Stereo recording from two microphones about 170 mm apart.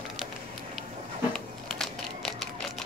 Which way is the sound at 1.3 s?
5° left (ahead or behind).